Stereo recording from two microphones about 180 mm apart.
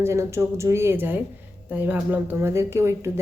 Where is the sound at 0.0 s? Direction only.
15° right (ahead or behind).